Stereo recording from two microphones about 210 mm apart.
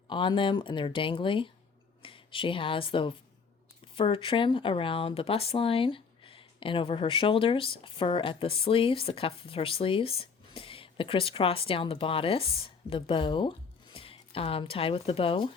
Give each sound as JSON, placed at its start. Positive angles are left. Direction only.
{"t": 0.1, "sound": "speech", "side_deg": 20}